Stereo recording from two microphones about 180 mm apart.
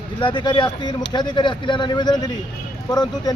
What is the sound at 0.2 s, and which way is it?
Speech, 25° left (ahead or behind).